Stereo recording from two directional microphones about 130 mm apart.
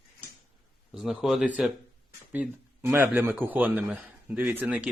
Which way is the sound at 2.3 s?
15° right (ahead or behind).